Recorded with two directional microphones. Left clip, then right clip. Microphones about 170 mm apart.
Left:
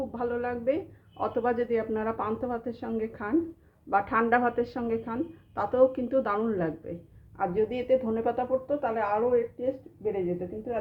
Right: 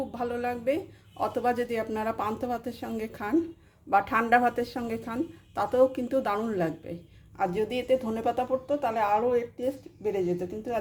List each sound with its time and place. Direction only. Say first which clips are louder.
0.1 s a woman's voice: even; 10° right (ahead or behind); by 10.8 s 35° right (ahead or behind)